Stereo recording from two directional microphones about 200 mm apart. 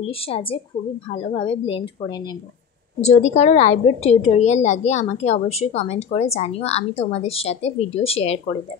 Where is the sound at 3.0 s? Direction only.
35° left (ahead or behind).